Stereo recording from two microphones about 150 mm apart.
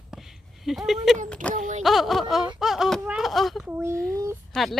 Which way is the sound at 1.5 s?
55° right (ahead or behind).